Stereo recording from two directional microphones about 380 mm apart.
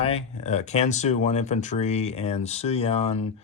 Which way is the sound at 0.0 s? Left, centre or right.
Centre.